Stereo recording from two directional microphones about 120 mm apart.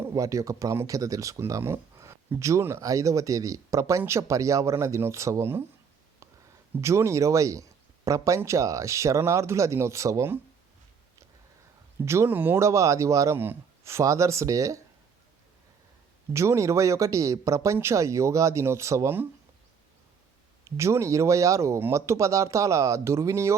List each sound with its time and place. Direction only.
0.0 s speech: 25° right (ahead or behind)
6.7 s speech: 25° right (ahead or behind)
12.0 s speech: 20° right (ahead or behind)
16.3 s speech: 25° right (ahead or behind)
20.7 s speech: 25° right (ahead or behind)